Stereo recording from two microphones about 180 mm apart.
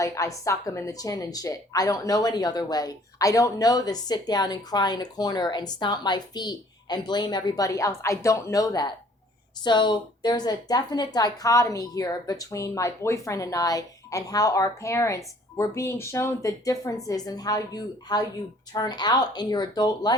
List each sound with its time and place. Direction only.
0.0 s speech: 20° left (ahead or behind)